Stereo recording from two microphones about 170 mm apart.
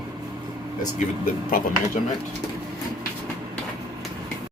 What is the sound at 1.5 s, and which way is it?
Speech, 60° left (ahead or behind).